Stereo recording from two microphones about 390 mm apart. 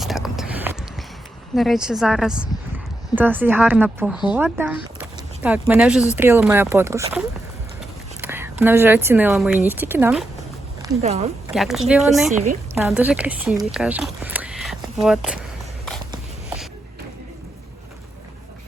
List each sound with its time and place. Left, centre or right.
0.0 s a sound: centre
1.5 s speech: centre
10.8 s speech: centre
11.5 s speech: centre